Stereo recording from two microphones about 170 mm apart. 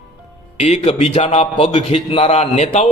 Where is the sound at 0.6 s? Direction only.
40° left (ahead or behind).